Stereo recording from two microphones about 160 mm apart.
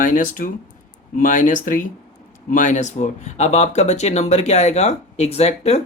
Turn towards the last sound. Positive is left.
turn(degrees=40)  # may be behind; listen again after turning